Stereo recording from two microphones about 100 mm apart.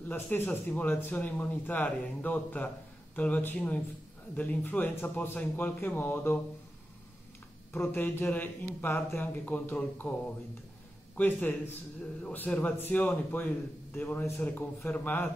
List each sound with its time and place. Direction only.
0.0 s a man's voice: 20° left (ahead or behind)
7.7 s a man's voice: 20° left (ahead or behind)
11.1 s a man's voice: 20° left (ahead or behind)